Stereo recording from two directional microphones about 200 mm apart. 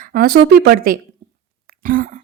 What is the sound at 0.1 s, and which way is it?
A woman's voice, 45° right (ahead or behind).